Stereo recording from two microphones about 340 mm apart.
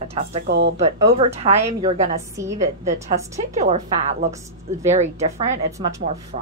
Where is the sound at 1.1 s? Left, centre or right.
Centre.